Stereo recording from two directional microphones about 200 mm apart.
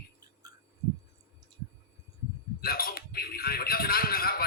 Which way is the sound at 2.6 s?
50° left (ahead or behind).